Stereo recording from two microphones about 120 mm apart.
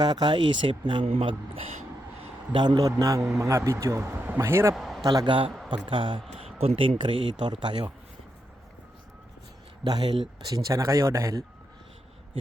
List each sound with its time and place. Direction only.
0.0 s speech: 40° right (ahead or behind)
2.5 s a man's voice: 40° right (ahead or behind)
3.2 s a man's voice: 5° right (ahead or behind)
3.4 s speech: 25° right (ahead or behind)
4.7 s a sound: centre (ahead or behind)
5.0 s a man's voice: 30° right (ahead or behind)
5.7 s speech: 45° right (ahead or behind)
9.8 s speech: 35° right (ahead or behind)